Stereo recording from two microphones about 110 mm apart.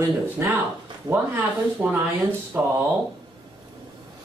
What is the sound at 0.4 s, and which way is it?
Speech, 20° right (ahead or behind).